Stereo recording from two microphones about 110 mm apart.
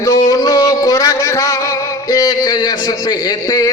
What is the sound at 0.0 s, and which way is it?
Music, 30° left (ahead or behind).